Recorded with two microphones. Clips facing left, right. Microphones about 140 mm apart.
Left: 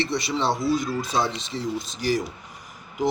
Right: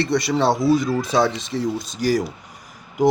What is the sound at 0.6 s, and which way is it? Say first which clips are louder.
Speech: right 6 dB; 65° right (ahead or behind).